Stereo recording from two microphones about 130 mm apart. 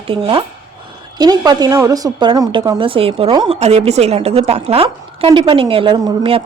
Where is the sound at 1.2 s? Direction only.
30° right (ahead or behind).